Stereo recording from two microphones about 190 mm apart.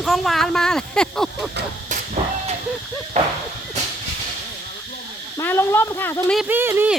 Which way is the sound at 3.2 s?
40° right (ahead or behind).